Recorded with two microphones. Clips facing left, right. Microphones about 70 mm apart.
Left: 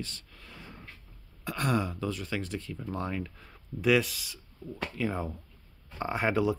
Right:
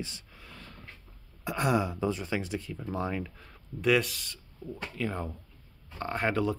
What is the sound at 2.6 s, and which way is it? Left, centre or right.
Speech, centre.